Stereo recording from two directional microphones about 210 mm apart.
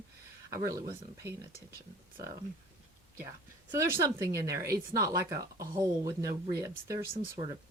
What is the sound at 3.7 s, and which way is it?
Speech, 15° right (ahead or behind).